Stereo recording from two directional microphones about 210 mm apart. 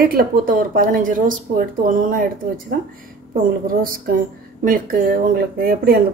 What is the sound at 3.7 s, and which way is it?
Speech, 40° right (ahead or behind).